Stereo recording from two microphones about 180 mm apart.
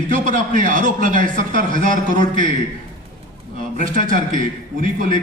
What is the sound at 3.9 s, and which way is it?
Speech, 45° right (ahead or behind).